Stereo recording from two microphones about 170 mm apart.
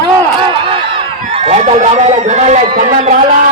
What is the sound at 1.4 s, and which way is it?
A man's voice, 40° right (ahead or behind).